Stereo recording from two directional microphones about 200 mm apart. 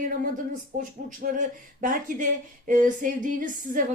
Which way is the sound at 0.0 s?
40° right (ahead or behind).